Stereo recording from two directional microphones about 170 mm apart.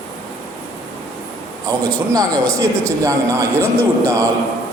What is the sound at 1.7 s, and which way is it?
A man's voice, 20° right (ahead or behind).